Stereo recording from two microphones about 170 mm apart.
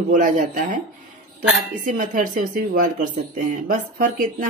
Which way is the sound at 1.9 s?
50° right (ahead or behind).